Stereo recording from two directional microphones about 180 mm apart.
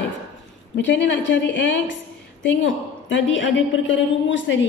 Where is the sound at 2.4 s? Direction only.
90° left.